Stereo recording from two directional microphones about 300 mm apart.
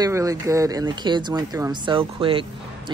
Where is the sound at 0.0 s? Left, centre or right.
Centre.